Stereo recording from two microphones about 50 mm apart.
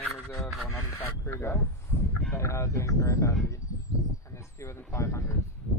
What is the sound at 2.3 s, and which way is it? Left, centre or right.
Speech, left.